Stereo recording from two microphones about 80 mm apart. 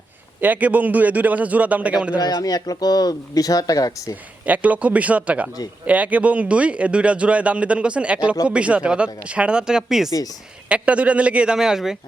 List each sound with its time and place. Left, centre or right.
0.4 s a man's voice: right
2.1 s speech: left
4.4 s a man's voice: centre